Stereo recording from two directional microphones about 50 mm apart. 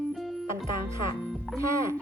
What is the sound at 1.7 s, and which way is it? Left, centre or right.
Speech, right.